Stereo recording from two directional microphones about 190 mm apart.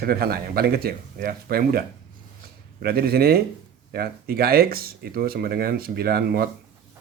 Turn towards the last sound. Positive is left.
turn(degrees=-50)  # may be behind; listen again after turning